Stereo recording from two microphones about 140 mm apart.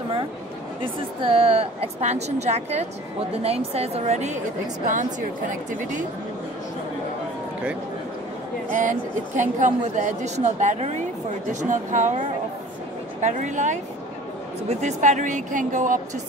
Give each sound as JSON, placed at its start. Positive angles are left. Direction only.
{"t": 1.2, "sound": "a woman's voice", "side_deg": -45}
{"t": 5.7, "sound": "a woman's voice", "side_deg": -65}
{"t": 8.6, "sound": "a woman's voice", "side_deg": -65}